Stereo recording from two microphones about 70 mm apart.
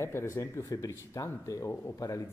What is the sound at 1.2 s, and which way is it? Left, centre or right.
Speech, left.